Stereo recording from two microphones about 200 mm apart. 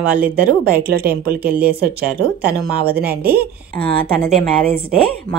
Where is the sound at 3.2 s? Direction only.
10° right (ahead or behind).